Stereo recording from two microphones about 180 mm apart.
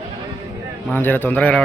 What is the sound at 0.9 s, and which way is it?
Speech, 10° left (ahead or behind).